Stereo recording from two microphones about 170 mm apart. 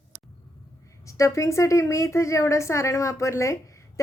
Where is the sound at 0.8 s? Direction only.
20° left (ahead or behind).